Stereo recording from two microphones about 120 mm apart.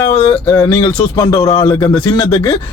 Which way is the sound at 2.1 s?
30° left (ahead or behind).